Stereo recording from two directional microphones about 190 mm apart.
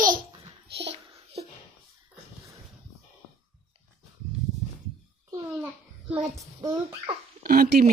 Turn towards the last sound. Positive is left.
turn(degrees=-50)  # may be behind; listen again after turning